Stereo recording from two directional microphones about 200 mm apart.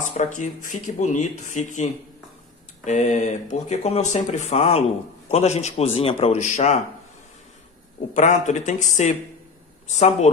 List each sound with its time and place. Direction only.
0.2 s speech: 40° left (ahead or behind)
2.8 s speech: 35° left (ahead or behind)
8.1 s speech: 35° left (ahead or behind)